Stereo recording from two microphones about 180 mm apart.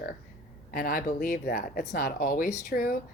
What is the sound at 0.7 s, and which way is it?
Speech, 50° left (ahead or behind).